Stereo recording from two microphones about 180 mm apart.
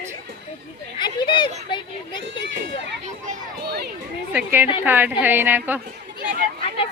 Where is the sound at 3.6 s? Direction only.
65° right (ahead or behind).